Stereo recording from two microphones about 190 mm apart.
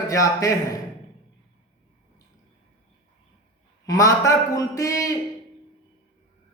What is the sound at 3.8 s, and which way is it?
A man's voice, 20° left (ahead or behind).